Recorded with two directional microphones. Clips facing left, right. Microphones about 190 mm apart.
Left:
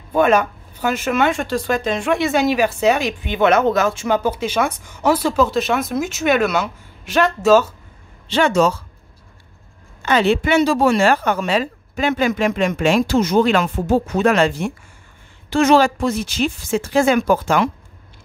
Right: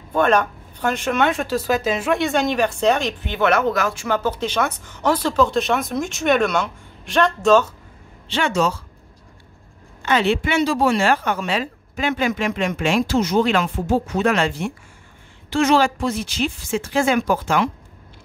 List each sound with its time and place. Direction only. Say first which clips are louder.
0.1 s speech: left 2 dB; 10° left (ahead or behind)
8.3 s a woman's voice: left 5 dB; 40° left (ahead or behind)
10.0 s a woman's voice: left 3 dB; 40° left (ahead or behind)